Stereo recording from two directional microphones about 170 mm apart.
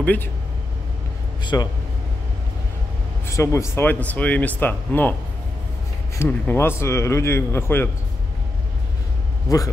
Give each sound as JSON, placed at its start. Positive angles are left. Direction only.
{"t": 0.0, "sound": "speech", "side_deg": 10}
{"t": 1.4, "sound": "a man's voice", "side_deg": 25}
{"t": 3.3, "sound": "speech", "side_deg": 15}
{"t": 6.1, "sound": "speech", "side_deg": 15}
{"t": 9.5, "sound": "a man's voice", "side_deg": 20}